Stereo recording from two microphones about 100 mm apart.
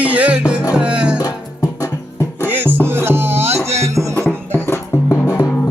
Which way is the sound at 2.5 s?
20° right (ahead or behind).